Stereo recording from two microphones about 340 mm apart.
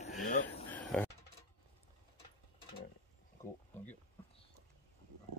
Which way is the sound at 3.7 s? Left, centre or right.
Centre.